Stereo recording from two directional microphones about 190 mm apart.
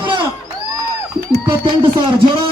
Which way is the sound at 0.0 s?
25° right (ahead or behind).